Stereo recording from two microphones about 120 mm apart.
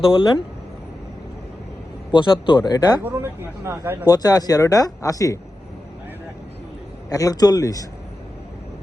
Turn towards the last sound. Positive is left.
turn(degrees=30)  # may be behind; listen again after turning